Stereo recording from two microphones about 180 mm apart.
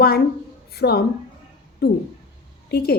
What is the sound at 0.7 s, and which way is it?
Speech, 60° left (ahead or behind).